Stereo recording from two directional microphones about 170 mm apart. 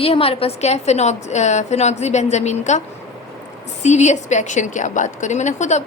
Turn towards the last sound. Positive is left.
turn(degrees=45)  # may be behind; listen again after turning